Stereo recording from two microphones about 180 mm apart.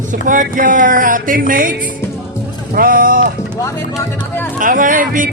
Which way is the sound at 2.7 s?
50° right (ahead or behind).